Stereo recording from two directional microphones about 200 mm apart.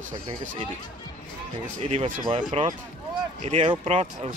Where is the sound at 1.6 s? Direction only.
35° right (ahead or behind).